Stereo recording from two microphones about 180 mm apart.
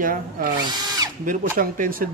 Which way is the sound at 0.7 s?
20° right (ahead or behind).